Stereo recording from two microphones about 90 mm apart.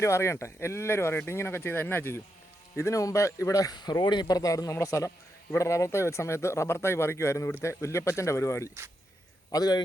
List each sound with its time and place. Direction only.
0.0 s a man's voice: 30° left (ahead or behind)
9.5 s a man's voice: 45° left (ahead or behind)